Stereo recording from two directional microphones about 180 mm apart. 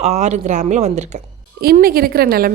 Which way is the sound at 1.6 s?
55° right (ahead or behind).